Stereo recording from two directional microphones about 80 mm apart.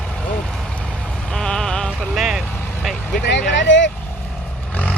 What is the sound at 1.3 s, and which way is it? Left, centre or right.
Music, centre.